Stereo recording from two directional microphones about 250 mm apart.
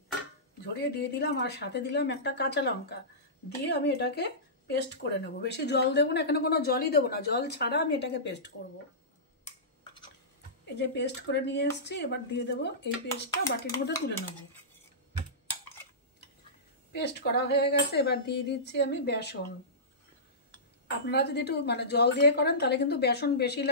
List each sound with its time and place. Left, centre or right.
0.7 s speech: left
10.6 s speech: left
16.9 s speech: left
20.9 s speech: left